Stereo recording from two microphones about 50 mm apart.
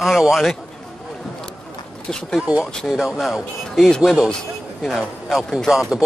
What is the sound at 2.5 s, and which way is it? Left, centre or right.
Speech, right.